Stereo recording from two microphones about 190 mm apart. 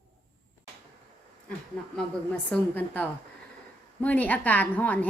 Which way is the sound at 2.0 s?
5° left (ahead or behind).